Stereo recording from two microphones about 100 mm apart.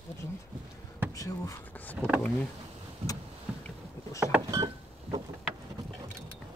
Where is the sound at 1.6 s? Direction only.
15° left (ahead or behind).